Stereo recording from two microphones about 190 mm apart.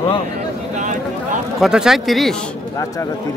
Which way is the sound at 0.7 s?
40° right (ahead or behind).